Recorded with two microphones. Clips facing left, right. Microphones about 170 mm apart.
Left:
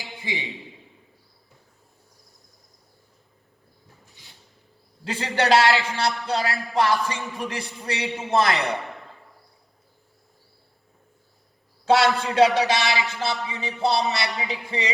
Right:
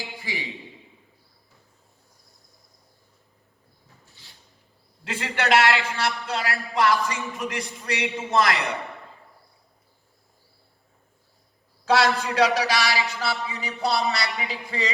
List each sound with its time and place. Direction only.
0.0 s a man's voice: 20° left (ahead or behind)
5.0 s a man's voice: 30° left (ahead or behind)
11.9 s a man's voice: 25° left (ahead or behind)